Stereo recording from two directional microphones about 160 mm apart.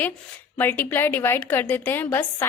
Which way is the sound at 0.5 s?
10° left (ahead or behind).